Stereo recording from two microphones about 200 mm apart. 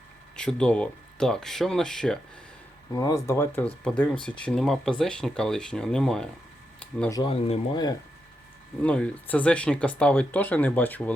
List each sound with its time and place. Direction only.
0.3 s speech: 5° left (ahead or behind)
2.9 s speech: 15° left (ahead or behind)
7.1 s speech: 25° left (ahead or behind)
8.8 s speech: 5° left (ahead or behind)